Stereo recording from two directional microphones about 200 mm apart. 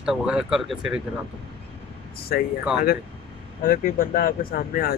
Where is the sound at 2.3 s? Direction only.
45° left (ahead or behind).